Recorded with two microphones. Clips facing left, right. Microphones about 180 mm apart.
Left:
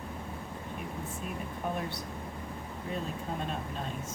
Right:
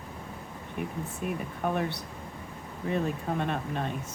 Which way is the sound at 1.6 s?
65° right (ahead or behind).